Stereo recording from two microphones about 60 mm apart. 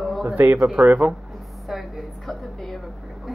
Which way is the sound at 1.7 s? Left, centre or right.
Centre.